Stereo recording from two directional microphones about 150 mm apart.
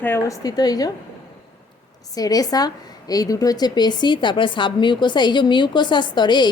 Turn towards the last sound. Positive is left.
turn(degrees=30)  # may be behind; listen again after turning